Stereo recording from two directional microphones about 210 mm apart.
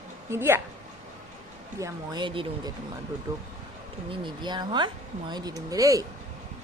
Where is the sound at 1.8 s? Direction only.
15° right (ahead or behind).